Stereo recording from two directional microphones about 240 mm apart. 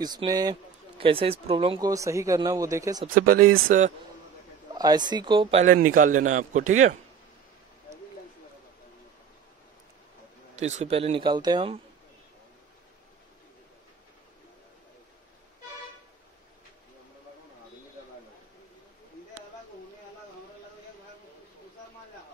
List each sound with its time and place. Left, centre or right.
0.0 s speech: centre
3.2 s a man's voice: right
4.7 s a man's voice: centre
10.6 s speech: right